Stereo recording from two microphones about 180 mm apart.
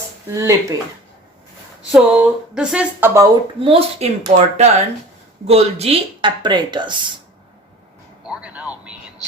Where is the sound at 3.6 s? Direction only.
30° right (ahead or behind).